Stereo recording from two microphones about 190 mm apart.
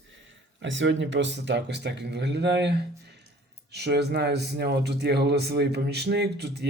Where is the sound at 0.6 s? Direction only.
75° right (ahead or behind).